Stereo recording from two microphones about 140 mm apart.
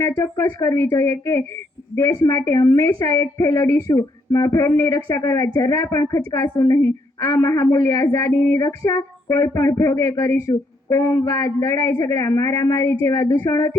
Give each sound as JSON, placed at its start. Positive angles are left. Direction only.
{"t": 0.0, "sound": "speech", "side_deg": 20}